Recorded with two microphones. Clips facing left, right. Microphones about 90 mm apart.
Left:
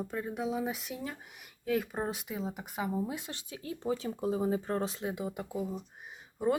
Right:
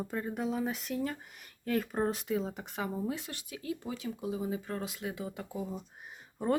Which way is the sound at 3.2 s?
25° left (ahead or behind).